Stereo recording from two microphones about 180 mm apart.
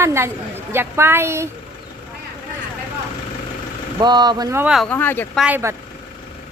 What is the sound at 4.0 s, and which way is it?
Speech, 25° right (ahead or behind).